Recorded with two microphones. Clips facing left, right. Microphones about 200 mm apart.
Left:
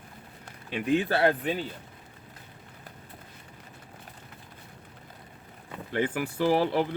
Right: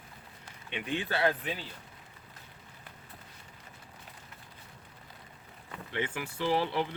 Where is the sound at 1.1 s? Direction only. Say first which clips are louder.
Left 5 dB; 55° left (ahead or behind).